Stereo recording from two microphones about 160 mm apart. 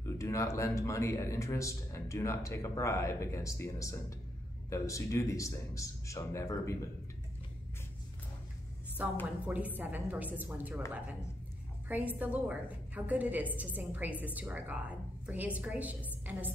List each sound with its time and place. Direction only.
0.0 s speech: 20° left (ahead or behind)
9.0 s a woman's voice: 10° right (ahead or behind)
11.9 s a woman's voice: 10° right (ahead or behind)